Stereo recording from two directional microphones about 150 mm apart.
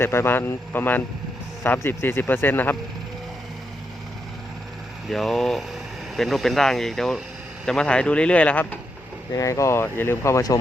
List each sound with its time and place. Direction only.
0.0 s speech: 15° left (ahead or behind)
5.0 s speech: centre (ahead or behind)
9.3 s speech: 20° left (ahead or behind)